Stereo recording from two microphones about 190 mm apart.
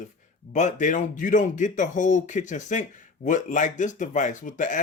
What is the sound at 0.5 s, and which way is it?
Speech, 40° left (ahead or behind).